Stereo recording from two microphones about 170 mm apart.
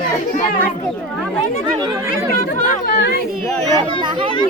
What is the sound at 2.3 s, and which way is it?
Speech, 55° left (ahead or behind).